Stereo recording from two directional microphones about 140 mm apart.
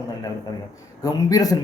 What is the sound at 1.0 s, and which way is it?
Speech, 25° left (ahead or behind).